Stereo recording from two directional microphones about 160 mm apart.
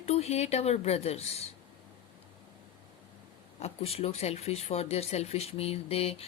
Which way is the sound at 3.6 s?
40° left (ahead or behind).